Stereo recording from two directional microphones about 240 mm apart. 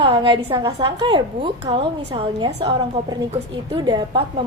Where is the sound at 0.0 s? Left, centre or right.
Right.